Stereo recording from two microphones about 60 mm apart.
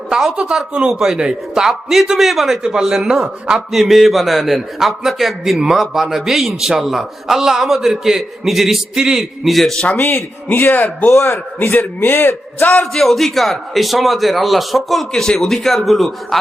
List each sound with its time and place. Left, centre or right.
0.1 s speech: centre
0.3 s a man's voice: centre
9.8 s a man's voice: left
12.8 s a man's voice: centre